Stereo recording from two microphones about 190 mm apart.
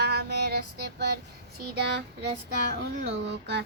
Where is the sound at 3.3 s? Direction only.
65° right (ahead or behind).